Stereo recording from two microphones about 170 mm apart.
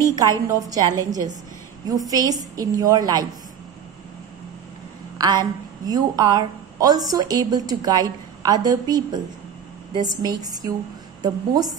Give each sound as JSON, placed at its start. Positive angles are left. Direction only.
{"t": 0.1, "sound": "a woman's voice", "side_deg": -20}
{"t": 5.1, "sound": "a woman's voice", "side_deg": -25}